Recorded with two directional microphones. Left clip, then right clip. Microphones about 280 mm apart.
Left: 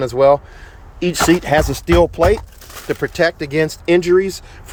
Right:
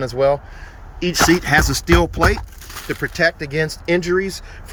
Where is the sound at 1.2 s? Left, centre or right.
Centre.